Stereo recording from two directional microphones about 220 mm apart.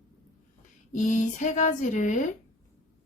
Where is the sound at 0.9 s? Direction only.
35° left (ahead or behind).